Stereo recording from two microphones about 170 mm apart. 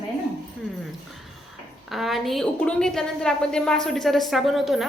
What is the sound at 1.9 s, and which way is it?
A woman's voice, centre (ahead or behind).